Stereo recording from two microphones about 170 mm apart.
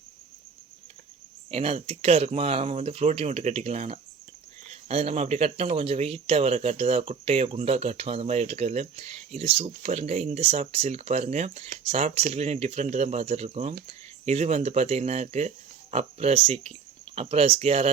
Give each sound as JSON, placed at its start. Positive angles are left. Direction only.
{"t": 1.5, "sound": "speech", "side_deg": -40}